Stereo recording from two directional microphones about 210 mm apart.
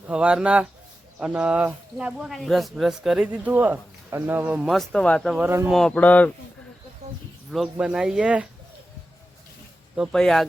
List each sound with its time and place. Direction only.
0.1 s speech: 5° right (ahead or behind)
5.5 s speech: 10° right (ahead or behind)
5.7 s speech: 5° left (ahead or behind)
7.0 s a sound: 30° right (ahead or behind)
7.5 s speech: 5° right (ahead or behind)
9.9 s speech: centre (ahead or behind)